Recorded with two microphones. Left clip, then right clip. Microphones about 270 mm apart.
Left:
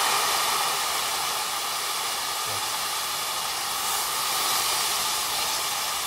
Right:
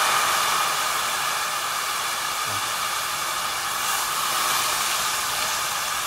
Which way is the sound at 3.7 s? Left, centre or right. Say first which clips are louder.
Right 3 dB; right.